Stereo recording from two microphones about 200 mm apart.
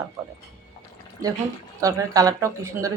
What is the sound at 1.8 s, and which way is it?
Speech, 15° right (ahead or behind).